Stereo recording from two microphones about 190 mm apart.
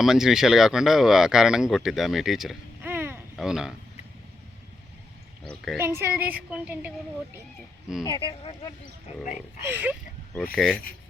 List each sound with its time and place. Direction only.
0.0 s speech: centre (ahead or behind)
5.7 s a woman's voice: 15° right (ahead or behind)
8.0 s speech: 25° left (ahead or behind)
9.6 s a woman's voice: 10° right (ahead or behind)
10.5 s speech: 5° left (ahead or behind)